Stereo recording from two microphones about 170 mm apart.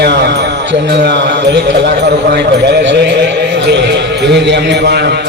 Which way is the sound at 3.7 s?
85° right.